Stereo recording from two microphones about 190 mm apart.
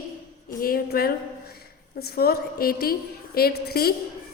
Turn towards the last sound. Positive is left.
turn(degrees=55)  # may be behind; listen again after turning